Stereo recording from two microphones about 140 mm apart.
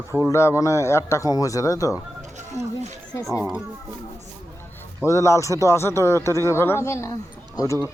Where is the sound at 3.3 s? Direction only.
15° right (ahead or behind).